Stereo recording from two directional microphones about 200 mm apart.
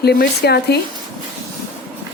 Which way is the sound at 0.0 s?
50° left (ahead or behind).